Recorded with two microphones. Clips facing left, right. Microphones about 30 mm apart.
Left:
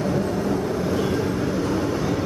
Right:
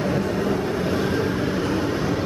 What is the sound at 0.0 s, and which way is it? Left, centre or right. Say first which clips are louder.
Vehicle: even; right.